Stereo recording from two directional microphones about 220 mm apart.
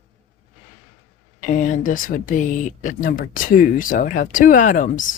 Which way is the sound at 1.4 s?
35° left (ahead or behind).